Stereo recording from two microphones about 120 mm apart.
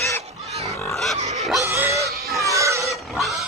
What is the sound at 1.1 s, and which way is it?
Dog, 70° right (ahead or behind).